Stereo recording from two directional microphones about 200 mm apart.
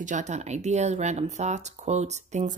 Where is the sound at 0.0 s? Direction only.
35° right (ahead or behind).